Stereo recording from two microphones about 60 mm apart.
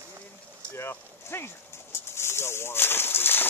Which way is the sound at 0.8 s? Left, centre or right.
Left.